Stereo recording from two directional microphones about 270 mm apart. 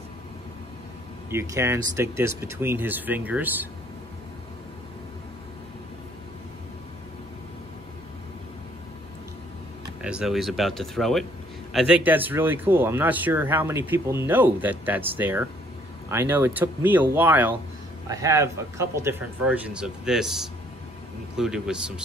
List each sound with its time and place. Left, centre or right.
1.3 s speech: centre
9.8 s speech: centre